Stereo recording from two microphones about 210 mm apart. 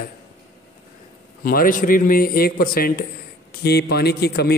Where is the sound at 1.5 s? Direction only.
40° left (ahead or behind).